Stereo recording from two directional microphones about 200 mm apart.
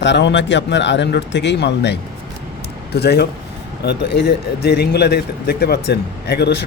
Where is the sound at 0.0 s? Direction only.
60° left (ahead or behind).